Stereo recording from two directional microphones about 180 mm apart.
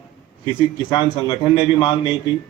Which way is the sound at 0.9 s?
25° left (ahead or behind).